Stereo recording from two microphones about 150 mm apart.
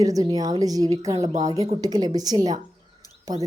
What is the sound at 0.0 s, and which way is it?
Speech, 25° right (ahead or behind).